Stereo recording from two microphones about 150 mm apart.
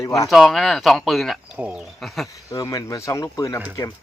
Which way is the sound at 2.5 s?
25° left (ahead or behind).